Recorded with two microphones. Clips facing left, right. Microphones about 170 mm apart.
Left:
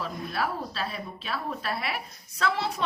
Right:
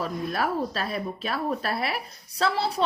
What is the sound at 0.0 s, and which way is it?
Speech, 45° right (ahead or behind).